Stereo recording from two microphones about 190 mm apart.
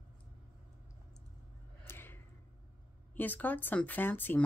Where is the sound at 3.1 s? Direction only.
10° left (ahead or behind).